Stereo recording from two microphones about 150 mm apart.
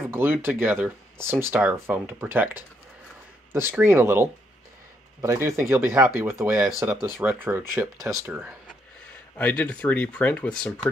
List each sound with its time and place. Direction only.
0.1 s speech: 15° right (ahead or behind)
8.0 s speech: 5° right (ahead or behind)
9.4 s speech: 10° left (ahead or behind)